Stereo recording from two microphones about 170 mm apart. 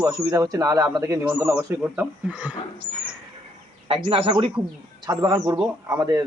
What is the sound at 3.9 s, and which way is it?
Speech, 35° right (ahead or behind).